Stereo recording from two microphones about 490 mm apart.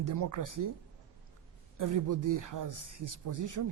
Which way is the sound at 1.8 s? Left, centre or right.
Right.